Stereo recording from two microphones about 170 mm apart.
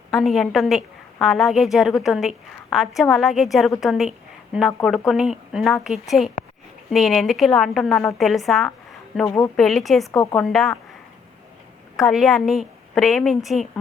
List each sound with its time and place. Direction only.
0.1 s a woman's voice: centre (ahead or behind)
9.2 s a woman's voice: 15° left (ahead or behind)
9.6 s a woman's voice: centre (ahead or behind)
11.9 s a woman's voice: centre (ahead or behind)